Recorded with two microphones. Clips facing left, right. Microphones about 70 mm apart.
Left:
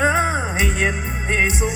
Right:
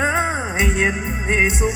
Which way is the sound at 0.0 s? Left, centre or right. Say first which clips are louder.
Left 1 dB; centre.